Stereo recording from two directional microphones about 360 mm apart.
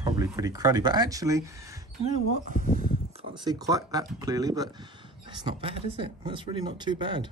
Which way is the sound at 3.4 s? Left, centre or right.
Centre.